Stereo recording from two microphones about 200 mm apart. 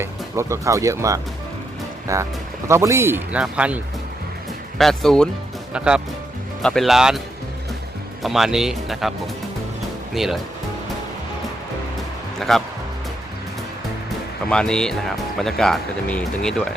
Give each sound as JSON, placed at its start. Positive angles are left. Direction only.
{"t": 0.0, "sound": "speech", "side_deg": -15}
{"t": 4.8, "sound": "speech", "side_deg": 0}
{"t": 8.2, "sound": "speech", "side_deg": 0}
{"t": 12.4, "sound": "speech", "side_deg": 0}
{"t": 14.5, "sound": "speech", "side_deg": 5}